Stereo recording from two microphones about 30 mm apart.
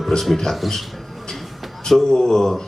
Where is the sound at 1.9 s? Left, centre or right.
Centre.